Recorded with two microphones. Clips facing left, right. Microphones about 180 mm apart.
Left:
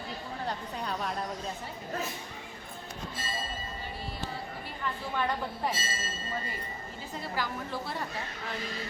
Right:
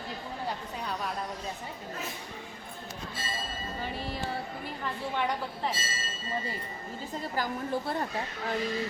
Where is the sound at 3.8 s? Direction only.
90° right.